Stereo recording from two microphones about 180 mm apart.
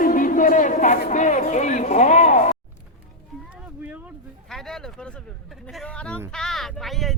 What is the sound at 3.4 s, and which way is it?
Speech, 5° right (ahead or behind).